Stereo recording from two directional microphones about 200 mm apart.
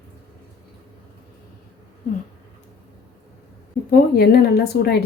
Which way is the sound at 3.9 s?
50° left (ahead or behind).